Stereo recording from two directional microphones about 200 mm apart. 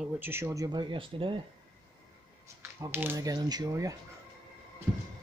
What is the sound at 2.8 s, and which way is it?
Speech, 10° right (ahead or behind).